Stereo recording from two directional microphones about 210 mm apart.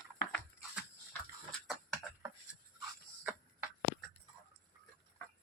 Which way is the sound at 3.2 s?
10° right (ahead or behind).